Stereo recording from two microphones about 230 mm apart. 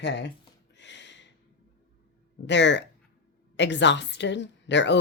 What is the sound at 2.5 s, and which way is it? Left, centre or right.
Speech, left.